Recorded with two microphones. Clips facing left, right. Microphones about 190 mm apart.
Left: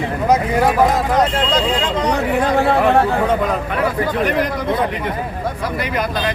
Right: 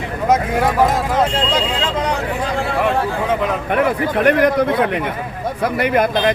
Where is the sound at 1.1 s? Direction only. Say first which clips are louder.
Left 1 dB; 10° right (ahead or behind).